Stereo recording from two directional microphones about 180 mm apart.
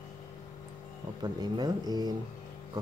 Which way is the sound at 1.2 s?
20° right (ahead or behind).